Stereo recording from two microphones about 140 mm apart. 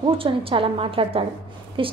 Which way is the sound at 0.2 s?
40° right (ahead or behind).